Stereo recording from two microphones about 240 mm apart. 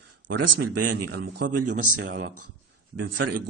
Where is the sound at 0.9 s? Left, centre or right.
Right.